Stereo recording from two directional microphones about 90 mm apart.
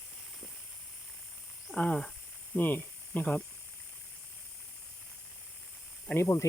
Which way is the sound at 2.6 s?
20° left (ahead or behind).